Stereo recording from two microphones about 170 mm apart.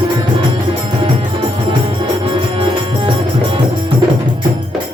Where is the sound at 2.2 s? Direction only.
30° right (ahead or behind).